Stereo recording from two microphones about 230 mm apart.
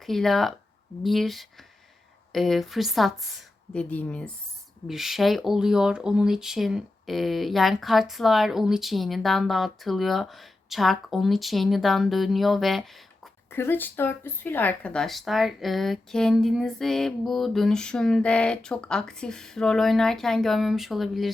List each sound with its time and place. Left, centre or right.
0.0 s speech: centre